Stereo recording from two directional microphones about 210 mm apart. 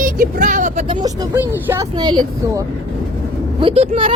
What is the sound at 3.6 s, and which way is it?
Speech, 25° right (ahead or behind).